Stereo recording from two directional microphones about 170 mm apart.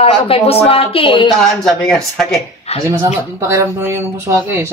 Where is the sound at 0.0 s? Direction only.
35° left (ahead or behind).